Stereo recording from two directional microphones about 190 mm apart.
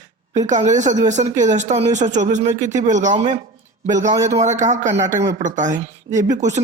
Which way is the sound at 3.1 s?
25° right (ahead or behind).